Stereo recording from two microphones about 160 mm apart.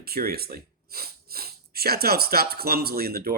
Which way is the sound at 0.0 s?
70° right (ahead or behind).